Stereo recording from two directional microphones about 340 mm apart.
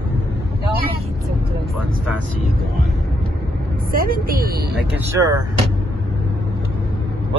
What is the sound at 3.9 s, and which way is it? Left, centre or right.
Speech, right.